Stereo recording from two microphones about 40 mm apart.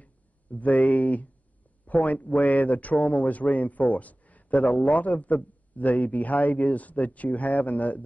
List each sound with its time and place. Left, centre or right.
0.0 s a man's voice: left